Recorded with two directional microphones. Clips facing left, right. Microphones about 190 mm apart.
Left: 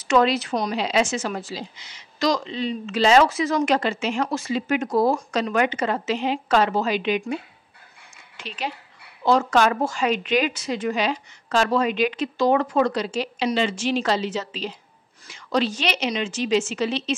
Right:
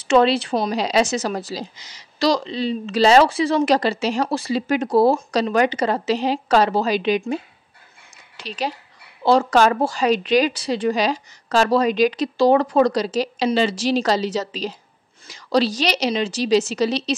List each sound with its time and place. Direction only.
0.0 s a woman's voice: 30° right (ahead or behind)
8.4 s a woman's voice: 35° right (ahead or behind)